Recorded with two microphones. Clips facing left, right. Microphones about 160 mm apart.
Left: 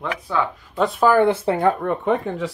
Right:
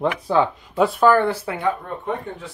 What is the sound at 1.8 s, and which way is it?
Speech, 80° left.